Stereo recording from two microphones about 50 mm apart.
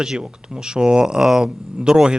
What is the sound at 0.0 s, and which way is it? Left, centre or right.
Speech, centre.